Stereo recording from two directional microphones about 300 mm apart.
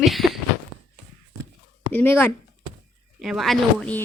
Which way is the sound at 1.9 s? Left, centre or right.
Centre.